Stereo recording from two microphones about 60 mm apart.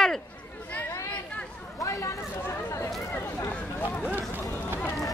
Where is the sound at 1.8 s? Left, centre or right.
Left.